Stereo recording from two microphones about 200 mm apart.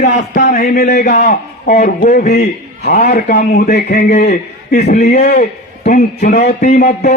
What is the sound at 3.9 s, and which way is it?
A man's voice, 35° left (ahead or behind).